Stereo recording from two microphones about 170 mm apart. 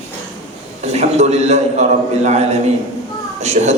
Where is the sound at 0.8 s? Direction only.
40° right (ahead or behind).